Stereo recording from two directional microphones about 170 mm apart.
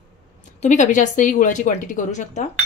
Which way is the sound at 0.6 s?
45° left (ahead or behind).